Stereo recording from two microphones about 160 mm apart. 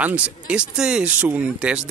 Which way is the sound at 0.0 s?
10° right (ahead or behind).